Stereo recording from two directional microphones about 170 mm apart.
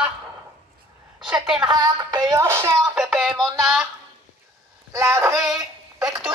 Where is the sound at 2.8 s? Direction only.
Centre (ahead or behind).